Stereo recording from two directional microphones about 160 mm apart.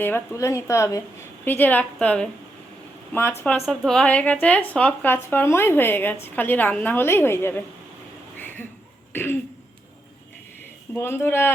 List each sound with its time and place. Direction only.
0.0 s a woman's voice: 15° left (ahead or behind)
8.4 s a sound: 10° left (ahead or behind)
9.1 s a woman's voice: 15° left (ahead or behind)
10.9 s a woman's voice: 15° left (ahead or behind)